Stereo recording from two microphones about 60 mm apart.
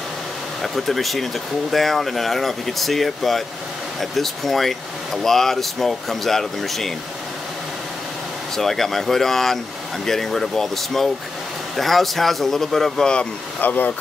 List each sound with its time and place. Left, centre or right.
0.6 s speech: centre
8.5 s speech: centre
13.6 s speech: left